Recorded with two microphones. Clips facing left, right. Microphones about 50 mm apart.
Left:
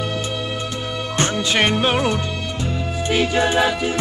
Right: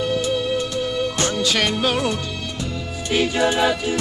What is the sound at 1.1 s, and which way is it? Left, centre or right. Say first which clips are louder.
Music: left 1 dB; left.